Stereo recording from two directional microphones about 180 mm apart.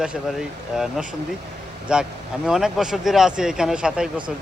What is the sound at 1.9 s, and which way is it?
Speech, 5° right (ahead or behind).